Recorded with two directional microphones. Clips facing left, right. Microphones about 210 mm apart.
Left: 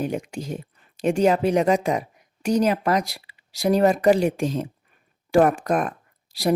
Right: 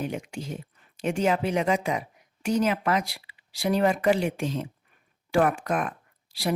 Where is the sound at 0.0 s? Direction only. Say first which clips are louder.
Left 5 dB; 40° left (ahead or behind).